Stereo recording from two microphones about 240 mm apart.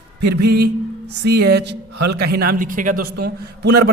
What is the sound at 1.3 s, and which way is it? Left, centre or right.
A man's voice, right.